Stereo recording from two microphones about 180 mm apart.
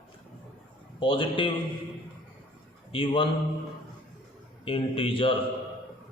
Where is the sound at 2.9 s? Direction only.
30° left (ahead or behind).